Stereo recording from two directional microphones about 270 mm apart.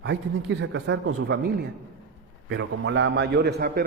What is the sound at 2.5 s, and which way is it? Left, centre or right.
A man's voice, right.